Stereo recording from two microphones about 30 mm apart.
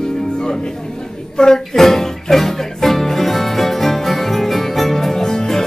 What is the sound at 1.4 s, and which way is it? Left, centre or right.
Speech, left.